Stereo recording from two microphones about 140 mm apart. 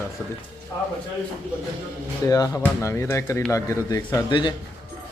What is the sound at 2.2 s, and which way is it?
A man's voice, 25° left (ahead or behind).